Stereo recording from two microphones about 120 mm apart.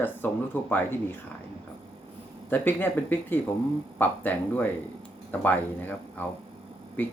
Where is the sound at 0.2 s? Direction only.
15° left (ahead or behind).